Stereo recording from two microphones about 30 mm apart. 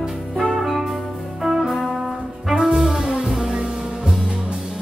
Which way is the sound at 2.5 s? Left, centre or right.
Right.